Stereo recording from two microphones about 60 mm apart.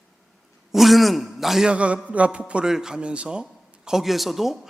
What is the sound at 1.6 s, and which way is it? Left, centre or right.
A man's voice, centre.